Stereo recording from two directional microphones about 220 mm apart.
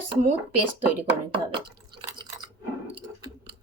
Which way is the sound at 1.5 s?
20° right (ahead or behind).